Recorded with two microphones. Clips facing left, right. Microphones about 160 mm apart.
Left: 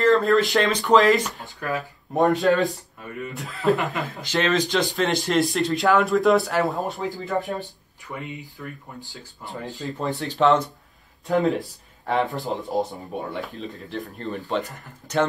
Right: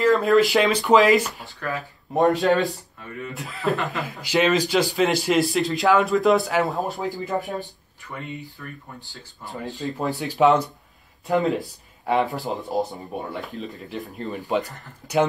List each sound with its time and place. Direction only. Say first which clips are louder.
0.0 s speech: right 1 dB; centre (ahead or behind)
1.4 s speech: left 2 dB; 20° left (ahead or behind)
2.1 s speech: even; centre (ahead or behind)
3.7 s speech: left 1 dB; 20° left (ahead or behind)
4.0 s speech: right 3 dB; 10° right (ahead or behind)
8.6 s speech: left 2 dB; 15° left (ahead or behind)
9.8 s speech: right 2 dB; centre (ahead or behind)
10.1 s speech: right 2 dB; 20° right (ahead or behind)
11.2 s speech: even; centre (ahead or behind)